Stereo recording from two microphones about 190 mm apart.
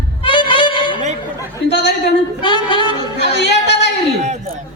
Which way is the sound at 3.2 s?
65° left (ahead or behind).